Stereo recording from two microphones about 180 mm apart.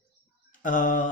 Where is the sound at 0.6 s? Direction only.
50° left (ahead or behind).